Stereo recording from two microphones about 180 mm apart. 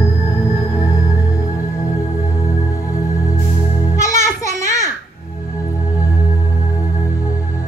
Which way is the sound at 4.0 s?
15° left (ahead or behind).